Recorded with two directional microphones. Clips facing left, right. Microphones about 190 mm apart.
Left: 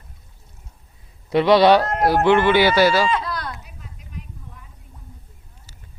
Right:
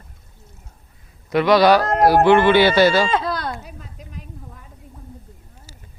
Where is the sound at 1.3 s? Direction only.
30° left (ahead or behind).